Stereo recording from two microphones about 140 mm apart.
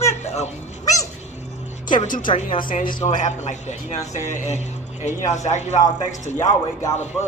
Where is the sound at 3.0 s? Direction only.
60° left (ahead or behind).